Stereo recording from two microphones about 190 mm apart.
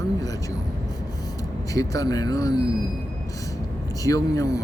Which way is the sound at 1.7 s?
20° left (ahead or behind).